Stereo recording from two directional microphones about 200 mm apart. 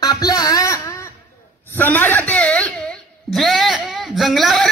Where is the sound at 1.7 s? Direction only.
10° left (ahead or behind).